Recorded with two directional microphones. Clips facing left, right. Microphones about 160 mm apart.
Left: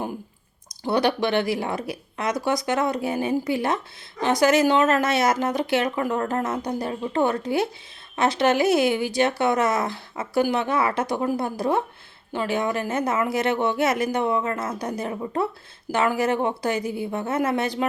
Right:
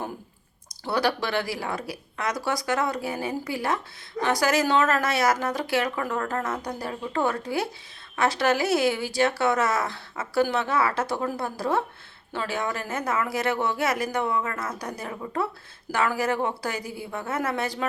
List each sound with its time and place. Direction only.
0.9 s speech: 20° left (ahead or behind)